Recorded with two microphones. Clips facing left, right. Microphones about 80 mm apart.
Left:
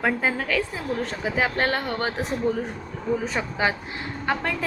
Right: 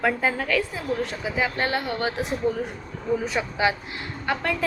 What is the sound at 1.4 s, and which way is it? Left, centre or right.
Speech, left.